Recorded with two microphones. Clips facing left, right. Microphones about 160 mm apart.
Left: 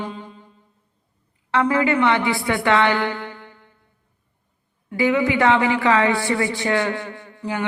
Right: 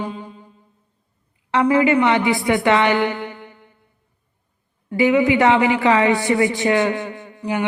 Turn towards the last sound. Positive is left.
turn(degrees=-15)  # may be behind; listen again after turning